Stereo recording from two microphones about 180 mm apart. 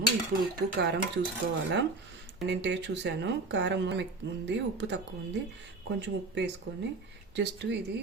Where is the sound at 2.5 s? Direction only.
80° right.